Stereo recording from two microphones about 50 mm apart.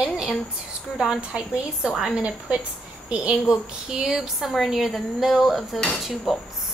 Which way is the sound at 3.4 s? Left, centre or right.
Centre.